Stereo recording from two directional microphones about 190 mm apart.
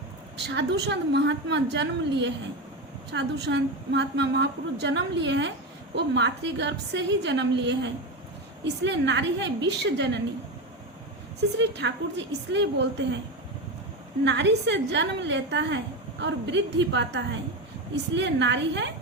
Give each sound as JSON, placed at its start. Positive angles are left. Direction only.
{"t": 0.3, "sound": "a woman's voice", "side_deg": -65}
{"t": 11.5, "sound": "a woman's voice", "side_deg": -65}
{"t": 14.3, "sound": "a woman's voice", "side_deg": -70}